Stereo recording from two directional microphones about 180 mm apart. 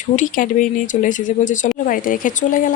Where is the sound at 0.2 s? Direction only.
45° left (ahead or behind).